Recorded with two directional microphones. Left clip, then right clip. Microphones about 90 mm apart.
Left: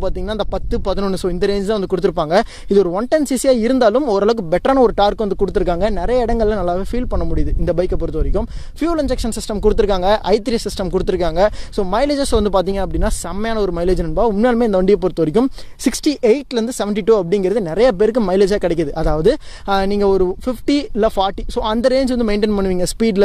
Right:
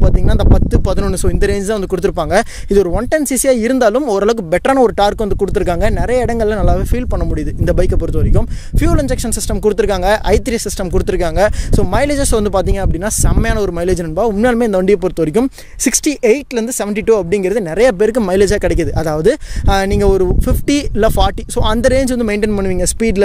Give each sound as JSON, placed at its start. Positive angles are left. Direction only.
{"t": 0.0, "sound": "a man's voice", "side_deg": -20}
{"t": 7.6, "sound": "speech", "side_deg": -45}
{"t": 8.4, "sound": "a man's voice", "side_deg": -25}
{"t": 21.9, "sound": "speech", "side_deg": -25}